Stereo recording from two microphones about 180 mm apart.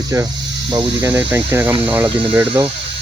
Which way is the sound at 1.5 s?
10° right (ahead or behind).